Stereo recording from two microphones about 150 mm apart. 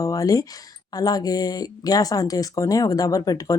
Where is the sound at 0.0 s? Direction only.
25° left (ahead or behind).